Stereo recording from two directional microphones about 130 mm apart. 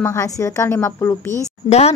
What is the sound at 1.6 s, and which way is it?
Speech, 55° left (ahead or behind).